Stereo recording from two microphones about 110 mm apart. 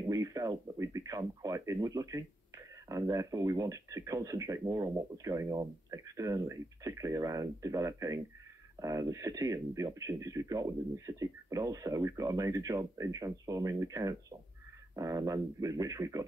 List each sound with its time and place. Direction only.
0.1 s speech: 30° right (ahead or behind)